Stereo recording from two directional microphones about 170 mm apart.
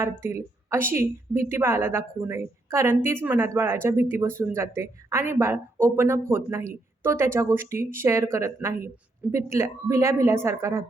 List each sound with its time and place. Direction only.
0.0 s a woman's voice: 15° right (ahead or behind)